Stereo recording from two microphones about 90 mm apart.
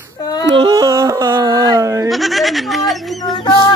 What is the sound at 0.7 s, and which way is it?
Yodeling, 40° right (ahead or behind).